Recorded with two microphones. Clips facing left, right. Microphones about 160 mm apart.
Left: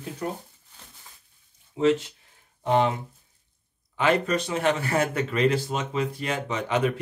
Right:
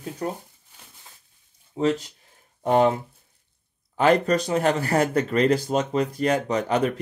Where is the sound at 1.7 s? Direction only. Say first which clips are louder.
Left 1 dB; 40° right (ahead or behind).